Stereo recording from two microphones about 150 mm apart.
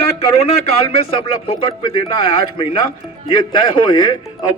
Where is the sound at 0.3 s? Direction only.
45° left (ahead or behind).